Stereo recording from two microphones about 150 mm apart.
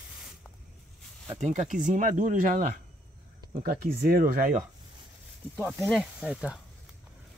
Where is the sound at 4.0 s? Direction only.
80° right.